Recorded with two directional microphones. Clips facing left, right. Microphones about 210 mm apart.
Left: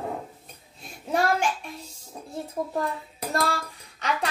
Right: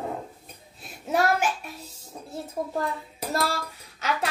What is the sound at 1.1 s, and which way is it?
Speech, 5° right (ahead or behind).